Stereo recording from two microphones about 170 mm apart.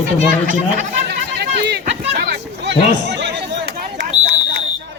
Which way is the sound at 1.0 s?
85° right.